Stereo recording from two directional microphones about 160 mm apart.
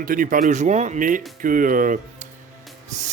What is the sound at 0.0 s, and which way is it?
A man's voice, 60° right (ahead or behind).